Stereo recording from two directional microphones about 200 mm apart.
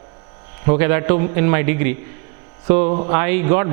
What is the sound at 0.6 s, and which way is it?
A man's voice, 15° right (ahead or behind).